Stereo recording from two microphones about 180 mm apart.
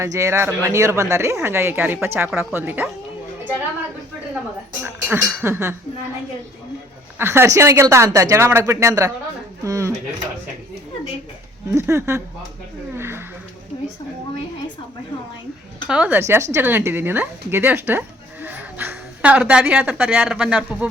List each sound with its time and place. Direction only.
0.0 s speech: 15° right (ahead or behind)
4.8 s speech: 10° right (ahead or behind)
7.2 s speech: 15° right (ahead or behind)
11.7 s speech: 15° right (ahead or behind)
13.0 s a sound: 15° right (ahead or behind)
15.9 s a woman's voice: 10° right (ahead or behind)